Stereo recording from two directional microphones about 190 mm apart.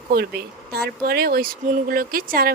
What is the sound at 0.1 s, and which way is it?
Speech, 55° right (ahead or behind).